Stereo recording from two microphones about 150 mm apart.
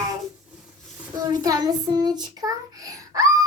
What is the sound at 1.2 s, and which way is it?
Child singing, 25° right (ahead or behind).